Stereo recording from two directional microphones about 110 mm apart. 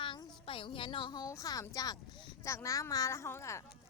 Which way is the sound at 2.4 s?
25° left (ahead or behind).